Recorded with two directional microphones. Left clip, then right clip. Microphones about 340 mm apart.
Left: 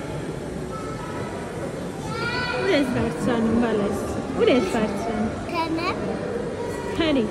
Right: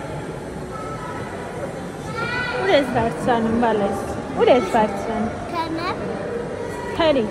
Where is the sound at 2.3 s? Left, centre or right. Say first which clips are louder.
Right 3 dB; centre.